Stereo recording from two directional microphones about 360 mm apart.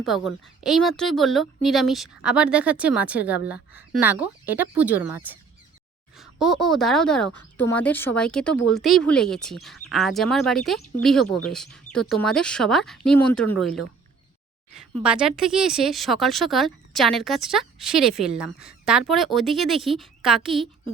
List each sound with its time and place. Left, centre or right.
0.0 s a woman's voice: centre
15.0 s a woman's voice: centre